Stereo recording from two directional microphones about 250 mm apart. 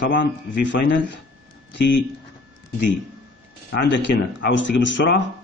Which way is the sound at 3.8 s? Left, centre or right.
Left.